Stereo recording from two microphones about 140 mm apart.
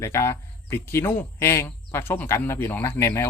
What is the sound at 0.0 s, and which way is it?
Speech, 20° left (ahead or behind).